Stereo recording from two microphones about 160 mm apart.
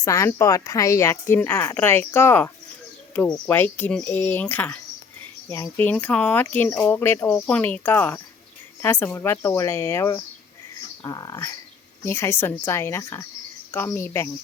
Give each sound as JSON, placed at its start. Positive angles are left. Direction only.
{"t": 0.0, "sound": "speech", "side_deg": 20}